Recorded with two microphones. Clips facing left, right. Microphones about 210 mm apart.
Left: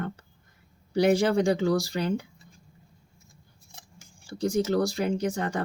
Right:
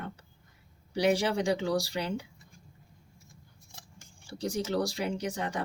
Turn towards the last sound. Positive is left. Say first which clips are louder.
# left 5 dB
turn(degrees=50)  # may be behind; listen again after turning